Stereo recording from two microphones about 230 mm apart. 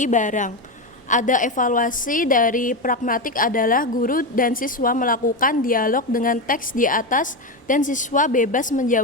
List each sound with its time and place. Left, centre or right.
0.0 s a woman's voice: left